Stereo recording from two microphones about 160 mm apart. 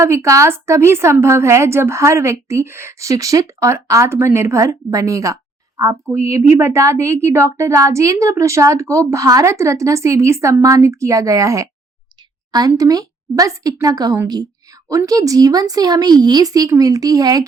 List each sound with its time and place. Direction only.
0.0 s a woman's voice: 15° right (ahead or behind)